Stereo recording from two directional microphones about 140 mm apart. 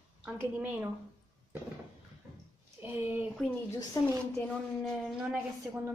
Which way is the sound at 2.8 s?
15° right (ahead or behind).